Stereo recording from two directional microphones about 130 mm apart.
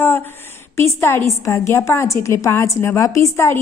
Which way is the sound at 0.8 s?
20° left (ahead or behind).